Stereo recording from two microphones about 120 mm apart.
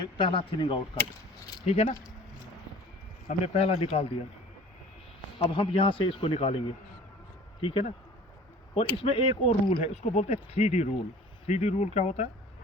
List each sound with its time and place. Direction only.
0.0 s speech: 45° left (ahead or behind)
1.6 s speech: 60° left (ahead or behind)
3.2 s speech: 60° left (ahead or behind)
5.4 s speech: 45° left (ahead or behind)
7.6 s speech: 50° left (ahead or behind)
9.8 s speech: 60° left (ahead or behind)